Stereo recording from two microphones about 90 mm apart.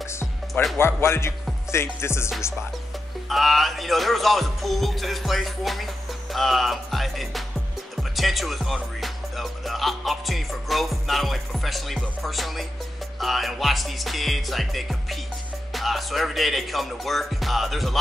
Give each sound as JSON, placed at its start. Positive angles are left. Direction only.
{"t": 0.0, "sound": "music", "side_deg": 30}
{"t": 0.7, "sound": "a man's voice", "side_deg": 25}
{"t": 3.3, "sound": "music", "side_deg": 0}
{"t": 7.9, "sound": "speech", "side_deg": 0}
{"t": 9.0, "sound": "music", "side_deg": 0}